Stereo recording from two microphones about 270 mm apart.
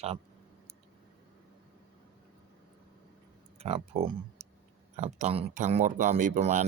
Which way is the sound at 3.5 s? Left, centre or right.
Right.